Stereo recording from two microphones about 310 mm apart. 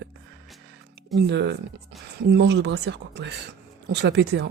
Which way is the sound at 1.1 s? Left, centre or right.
Right.